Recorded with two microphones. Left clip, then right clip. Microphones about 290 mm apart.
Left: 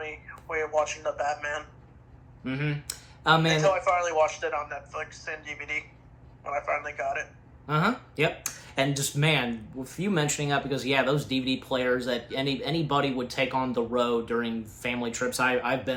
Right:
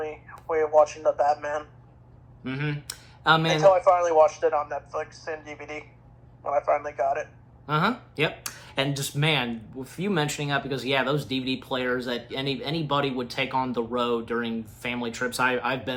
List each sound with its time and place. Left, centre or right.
0.0 s speech: centre
3.6 s speech: centre